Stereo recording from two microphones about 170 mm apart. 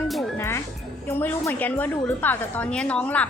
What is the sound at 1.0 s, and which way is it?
A woman's voice, 10° left (ahead or behind).